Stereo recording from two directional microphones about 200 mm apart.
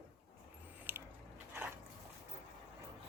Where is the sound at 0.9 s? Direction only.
10° right (ahead or behind).